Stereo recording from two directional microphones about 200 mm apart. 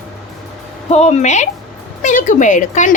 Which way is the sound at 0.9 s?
35° left (ahead or behind).